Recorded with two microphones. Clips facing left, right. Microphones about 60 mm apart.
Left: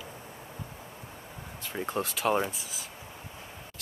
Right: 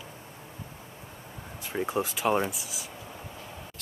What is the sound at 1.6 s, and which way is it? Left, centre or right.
Speech, centre.